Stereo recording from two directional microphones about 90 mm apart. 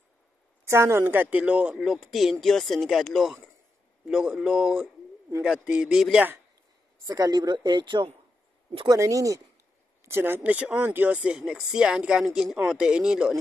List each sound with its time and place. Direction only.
0.7 s speech: 30° right (ahead or behind); by 1.8 s 15° right (ahead or behind)
1.8 s speech: centre (ahead or behind)
7.1 s speech: 50° right (ahead or behind)
8.8 s speech: 35° right (ahead or behind)
10.0 s speech: 25° right (ahead or behind); by 13.4 s 5° right (ahead or behind)